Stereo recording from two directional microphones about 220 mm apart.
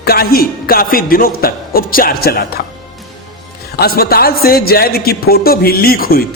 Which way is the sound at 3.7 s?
45° left (ahead or behind).